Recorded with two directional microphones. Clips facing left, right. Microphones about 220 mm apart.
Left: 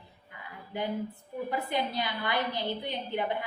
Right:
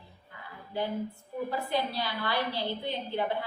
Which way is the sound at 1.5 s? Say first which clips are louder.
Left 1 dB; 20° left (ahead or behind).